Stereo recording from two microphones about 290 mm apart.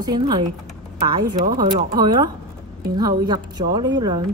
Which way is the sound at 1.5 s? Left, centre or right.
Centre.